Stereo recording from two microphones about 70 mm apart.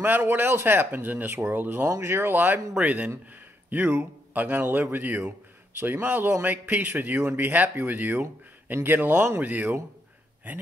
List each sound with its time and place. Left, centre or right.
0.0 s speech: right
1.9 s speech: right
3.7 s speech: right